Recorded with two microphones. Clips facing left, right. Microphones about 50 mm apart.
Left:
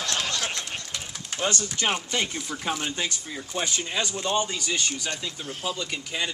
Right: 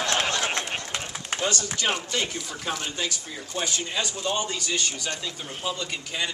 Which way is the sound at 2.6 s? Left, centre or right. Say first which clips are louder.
Left 1 dB; centre.